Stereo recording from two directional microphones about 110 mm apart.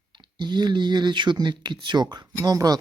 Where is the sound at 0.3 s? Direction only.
40° right (ahead or behind).